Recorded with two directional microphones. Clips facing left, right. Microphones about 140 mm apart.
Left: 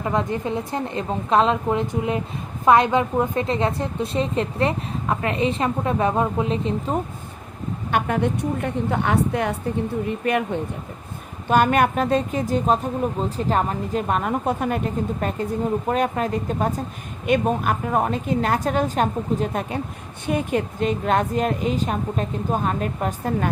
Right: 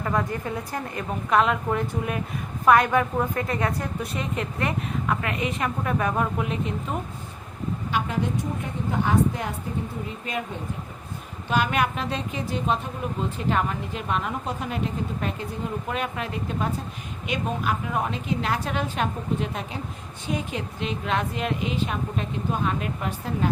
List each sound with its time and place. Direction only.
0.0 s a woman's voice: 20° left (ahead or behind)
7.9 s a woman's voice: 55° left (ahead or behind)
11.4 s speech: 50° left (ahead or behind)
20.2 s speech: 55° left (ahead or behind)